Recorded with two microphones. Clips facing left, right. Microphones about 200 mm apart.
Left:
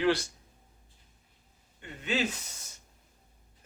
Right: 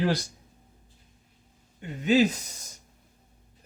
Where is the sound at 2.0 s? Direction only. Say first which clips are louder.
Right 10 dB; 40° right (ahead or behind).